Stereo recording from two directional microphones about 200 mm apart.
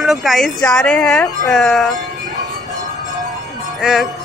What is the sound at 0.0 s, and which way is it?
Speech, centre (ahead or behind).